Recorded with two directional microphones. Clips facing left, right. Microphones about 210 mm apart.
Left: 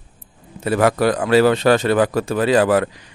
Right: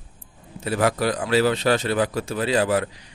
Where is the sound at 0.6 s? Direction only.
55° left (ahead or behind).